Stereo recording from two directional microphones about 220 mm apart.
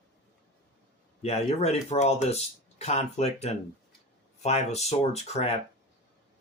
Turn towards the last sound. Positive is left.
turn(degrees=30)  # may be behind; listen again after turning